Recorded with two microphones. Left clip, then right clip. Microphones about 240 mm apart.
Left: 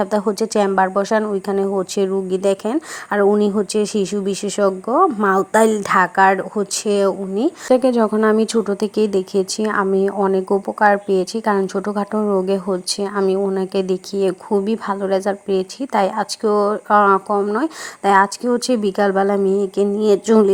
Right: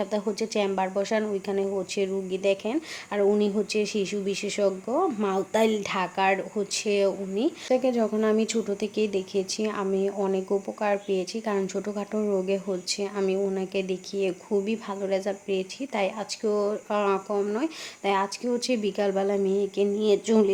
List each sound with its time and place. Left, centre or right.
0.0 s speech: left